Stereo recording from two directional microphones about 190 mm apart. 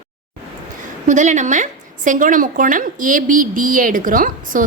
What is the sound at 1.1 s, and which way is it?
A woman's voice, 40° right (ahead or behind).